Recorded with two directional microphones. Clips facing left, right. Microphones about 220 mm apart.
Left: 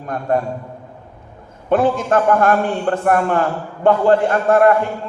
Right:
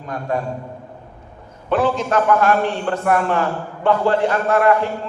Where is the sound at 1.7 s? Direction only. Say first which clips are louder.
Left 3 dB; 50° left (ahead or behind).